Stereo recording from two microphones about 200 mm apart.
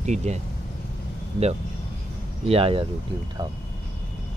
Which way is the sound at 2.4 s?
30° right (ahead or behind).